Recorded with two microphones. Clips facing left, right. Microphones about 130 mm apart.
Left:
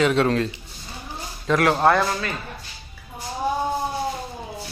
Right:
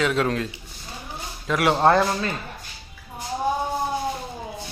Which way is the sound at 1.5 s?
10° right (ahead or behind).